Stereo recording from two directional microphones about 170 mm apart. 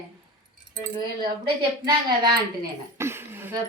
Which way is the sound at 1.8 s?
25° right (ahead or behind).